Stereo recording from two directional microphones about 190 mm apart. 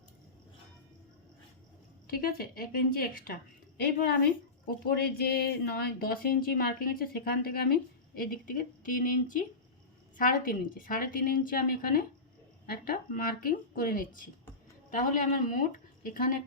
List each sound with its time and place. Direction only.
2.0 s speech: 50° left (ahead or behind)
4.6 s speech: 55° left (ahead or behind)